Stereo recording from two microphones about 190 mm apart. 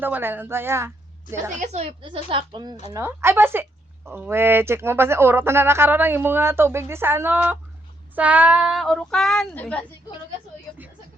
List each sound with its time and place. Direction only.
0.0 s a woman's voice: 10° right (ahead or behind)
1.6 s a woman's voice: 35° right (ahead or behind)
2.9 s speech: 15° right (ahead or behind); by 9.8 s 5° left (ahead or behind)